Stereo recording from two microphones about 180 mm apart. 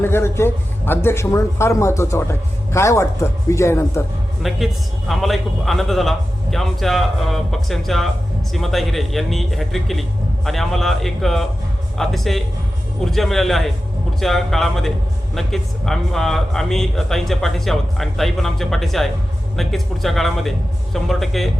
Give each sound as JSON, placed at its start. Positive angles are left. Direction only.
{"t": 0.0, "sound": "speech", "side_deg": 15}
{"t": 4.4, "sound": "speech", "side_deg": 0}